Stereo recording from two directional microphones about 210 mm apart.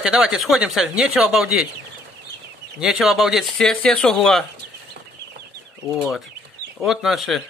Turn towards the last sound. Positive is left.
turn(degrees=0)  # may be behind; listen again after turning